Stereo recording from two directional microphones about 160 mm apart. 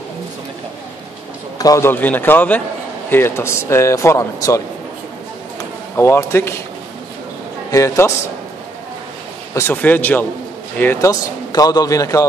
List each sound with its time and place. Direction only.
1.6 s speech: 20° left (ahead or behind)
5.9 s speech: 15° left (ahead or behind)
7.7 s a man's voice: 20° left (ahead or behind)
9.5 s a man's voice: 15° left (ahead or behind)